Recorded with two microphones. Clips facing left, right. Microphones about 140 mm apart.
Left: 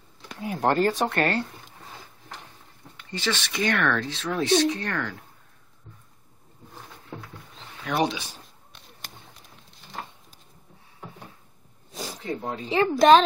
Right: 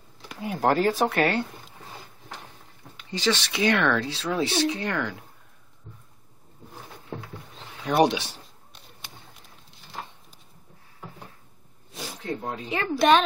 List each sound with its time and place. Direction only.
0.3 s speech: centre (ahead or behind)
3.1 s speech: 5° right (ahead or behind)
8.0 s speech: 65° right (ahead or behind)
10.0 s a sound: centre (ahead or behind)
11.9 s a sound: 40° left (ahead or behind)
12.2 s speech: 5° right (ahead or behind)
12.9 s a child's voice: 45° left (ahead or behind)